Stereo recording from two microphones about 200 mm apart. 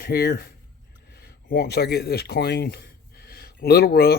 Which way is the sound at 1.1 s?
55° left (ahead or behind).